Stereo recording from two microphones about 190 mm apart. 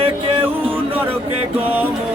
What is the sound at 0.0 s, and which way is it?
Music, 30° right (ahead or behind).